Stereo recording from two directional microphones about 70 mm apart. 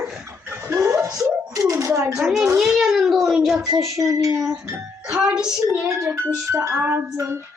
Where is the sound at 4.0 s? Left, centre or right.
Right.